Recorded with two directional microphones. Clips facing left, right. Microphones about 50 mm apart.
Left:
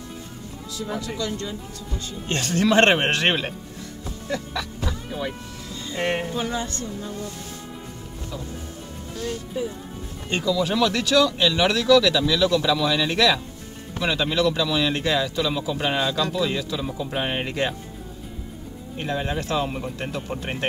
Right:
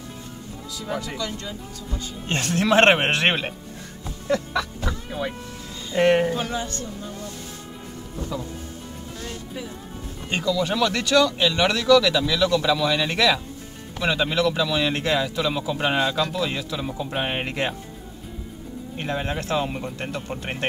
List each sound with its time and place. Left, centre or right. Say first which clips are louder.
2.2 s speech: left 1 dB; centre
5.9 s music: right 7 dB; right
10.4 s speech: left 1 dB; centre
19.0 s speech: left 1 dB; centre